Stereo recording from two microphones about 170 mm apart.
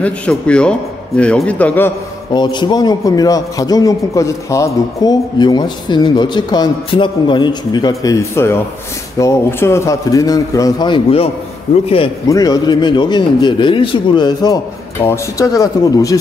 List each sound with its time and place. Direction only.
0.0 s speech: 5° left (ahead or behind)
2.3 s a man's voice: 25° left (ahead or behind)
12.3 s a man's voice: 20° left (ahead or behind)